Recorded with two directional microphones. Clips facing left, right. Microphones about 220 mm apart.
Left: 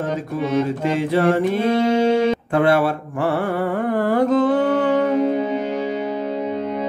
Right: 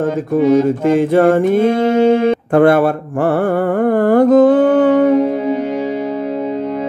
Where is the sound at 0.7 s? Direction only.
50° right (ahead or behind).